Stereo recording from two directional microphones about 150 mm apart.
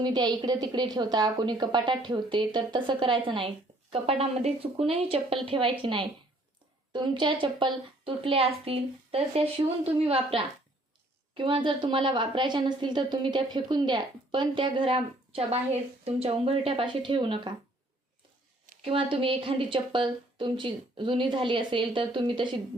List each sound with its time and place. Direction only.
0.0 s a woman's voice: 30° right (ahead or behind)
18.9 s a woman's voice: 35° right (ahead or behind)